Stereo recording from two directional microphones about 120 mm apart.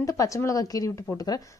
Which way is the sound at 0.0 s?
25° left (ahead or behind).